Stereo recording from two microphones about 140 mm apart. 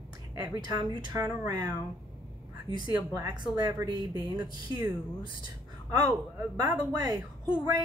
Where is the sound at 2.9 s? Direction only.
25° right (ahead or behind).